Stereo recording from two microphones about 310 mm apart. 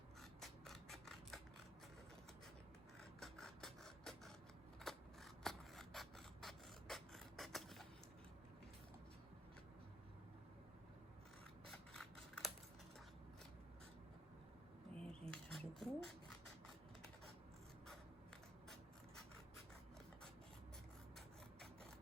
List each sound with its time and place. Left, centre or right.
0.2 s scissors: centre
3.0 s printer: centre
4.8 s scissors: centre
11.6 s mechanisms: centre
15.0 s a sound: centre